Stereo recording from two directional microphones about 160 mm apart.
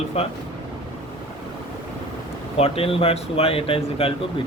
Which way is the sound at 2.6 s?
35° left (ahead or behind).